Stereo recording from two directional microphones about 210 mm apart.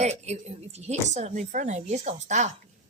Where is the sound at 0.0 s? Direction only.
30° right (ahead or behind).